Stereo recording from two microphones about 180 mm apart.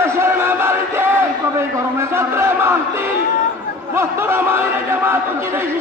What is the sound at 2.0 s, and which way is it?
A man's voice, 15° right (ahead or behind).